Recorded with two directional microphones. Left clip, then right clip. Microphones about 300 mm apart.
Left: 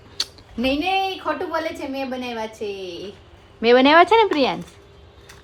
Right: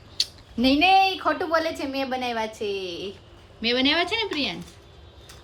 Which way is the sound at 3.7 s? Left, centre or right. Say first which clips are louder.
Left 10 dB; centre.